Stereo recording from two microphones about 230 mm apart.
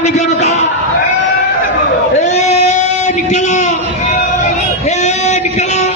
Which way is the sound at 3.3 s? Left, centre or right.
Left.